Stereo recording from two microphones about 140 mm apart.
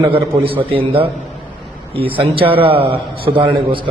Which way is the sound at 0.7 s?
40° right (ahead or behind).